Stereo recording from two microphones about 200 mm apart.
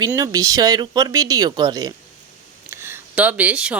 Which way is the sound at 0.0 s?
15° right (ahead or behind).